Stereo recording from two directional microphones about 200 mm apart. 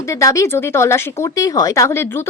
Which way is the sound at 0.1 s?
15° left (ahead or behind).